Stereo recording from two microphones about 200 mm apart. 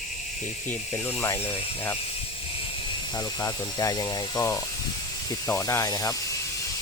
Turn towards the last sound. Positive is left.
turn(degrees=15)  # may be behind; listen again after turning